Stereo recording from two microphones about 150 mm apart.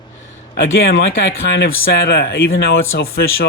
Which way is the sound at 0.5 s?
90° left.